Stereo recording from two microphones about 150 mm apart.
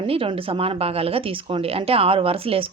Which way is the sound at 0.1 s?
40° right (ahead or behind).